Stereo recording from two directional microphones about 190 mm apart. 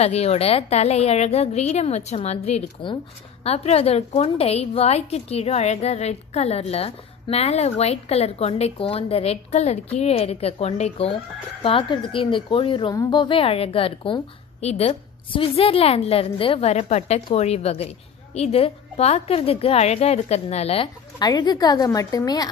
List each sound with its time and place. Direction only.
0.0 s a woman's voice: 35° left (ahead or behind)